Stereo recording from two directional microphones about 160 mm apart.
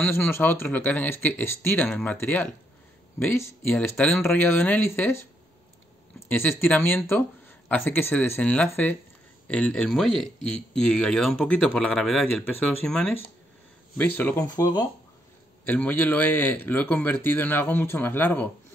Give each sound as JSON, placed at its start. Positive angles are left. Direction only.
{"t": 0.0, "sound": "speech", "side_deg": 10}
{"t": 15.6, "sound": "speech", "side_deg": 10}